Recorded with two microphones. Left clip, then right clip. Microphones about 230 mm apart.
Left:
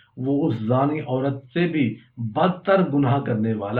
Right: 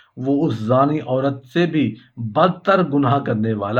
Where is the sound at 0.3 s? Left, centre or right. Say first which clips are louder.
Right 4 dB; right.